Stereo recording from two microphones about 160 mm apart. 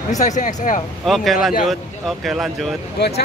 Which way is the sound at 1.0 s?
Centre (ahead or behind).